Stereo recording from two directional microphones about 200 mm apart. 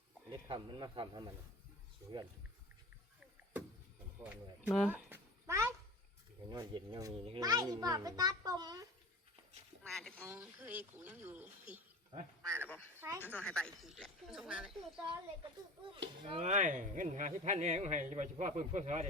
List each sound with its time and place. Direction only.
0.4 s a child's voice: 25° right (ahead or behind)
4.2 s a sound: 10° right (ahead or behind)
6.5 s a child's voice: 20° right (ahead or behind)
9.8 s speech: 5° left (ahead or behind)
10.2 s speech: 10° right (ahead or behind)
12.4 s speech: 5° left (ahead or behind)
16.2 s speech: 30° right (ahead or behind)